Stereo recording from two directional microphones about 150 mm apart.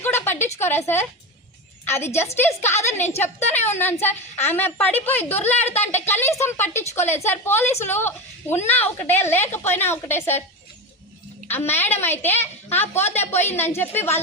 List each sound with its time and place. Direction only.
0.0 s a sound: 15° left (ahead or behind)
0.6 s a woman's voice: 15° left (ahead or behind)
11.4 s a woman's voice: 15° left (ahead or behind)